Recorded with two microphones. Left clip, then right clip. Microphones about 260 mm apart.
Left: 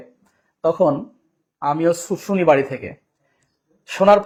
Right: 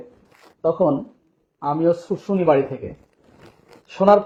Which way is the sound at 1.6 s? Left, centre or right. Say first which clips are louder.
Left 1 dB; left.